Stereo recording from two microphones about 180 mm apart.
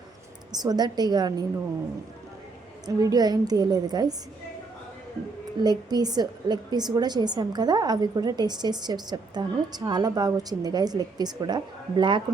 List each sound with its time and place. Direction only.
0.5 s a woman's voice: 20° right (ahead or behind)
2.8 s a woman's voice: 20° right (ahead or behind)
5.6 s a woman's voice: 20° right (ahead or behind)